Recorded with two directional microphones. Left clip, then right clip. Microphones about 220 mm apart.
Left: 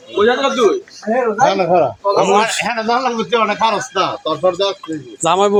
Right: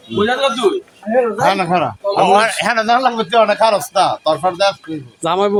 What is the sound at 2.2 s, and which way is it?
Speech, 25° right (ahead or behind).